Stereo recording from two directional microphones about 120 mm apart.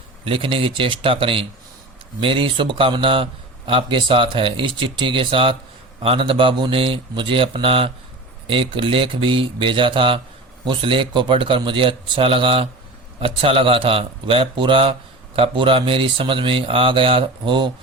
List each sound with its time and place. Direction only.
0.3 s speech: 45° right (ahead or behind)